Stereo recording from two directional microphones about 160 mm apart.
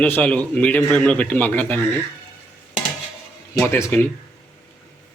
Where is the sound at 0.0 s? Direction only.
10° left (ahead or behind).